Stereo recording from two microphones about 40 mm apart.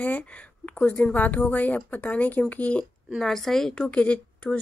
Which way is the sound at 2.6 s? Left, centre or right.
Left.